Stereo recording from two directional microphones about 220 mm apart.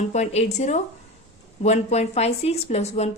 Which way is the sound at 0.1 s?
30° left (ahead or behind).